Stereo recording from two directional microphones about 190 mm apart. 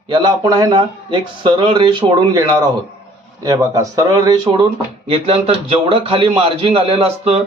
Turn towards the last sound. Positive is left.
turn(degrees=-35)  # may be behind; listen again after turning